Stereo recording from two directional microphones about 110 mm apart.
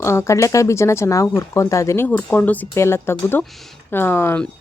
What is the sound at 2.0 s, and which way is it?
Speech, 15° left (ahead or behind).